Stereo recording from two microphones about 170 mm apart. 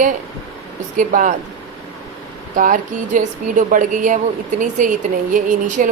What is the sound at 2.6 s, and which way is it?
Speech, 50° right (ahead or behind).